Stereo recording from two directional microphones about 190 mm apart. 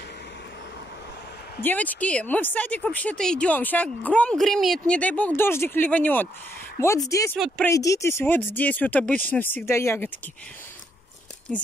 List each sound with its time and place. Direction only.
1.6 s speech: 10° left (ahead or behind)
7.3 s speech: centre (ahead or behind)
7.6 s speech: 15° left (ahead or behind)
11.5 s speech: 5° left (ahead or behind)